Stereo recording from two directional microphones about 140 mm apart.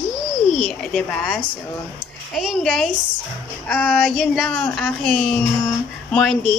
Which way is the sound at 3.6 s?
10° left (ahead or behind).